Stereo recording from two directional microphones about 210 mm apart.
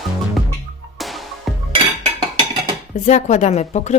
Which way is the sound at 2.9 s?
35° left (ahead or behind).